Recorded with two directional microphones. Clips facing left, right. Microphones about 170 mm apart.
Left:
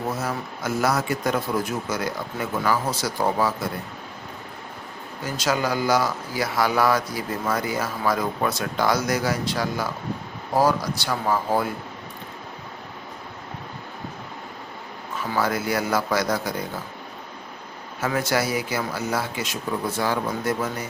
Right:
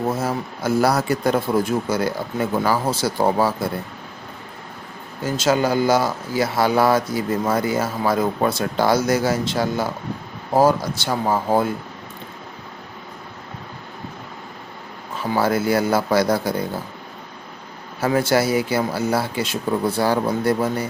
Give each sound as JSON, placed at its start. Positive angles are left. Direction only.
{"t": 0.1, "sound": "speech", "side_deg": -30}
{"t": 5.2, "sound": "speech", "side_deg": -25}
{"t": 15.2, "sound": "speech", "side_deg": -30}
{"t": 18.0, "sound": "speech", "side_deg": -30}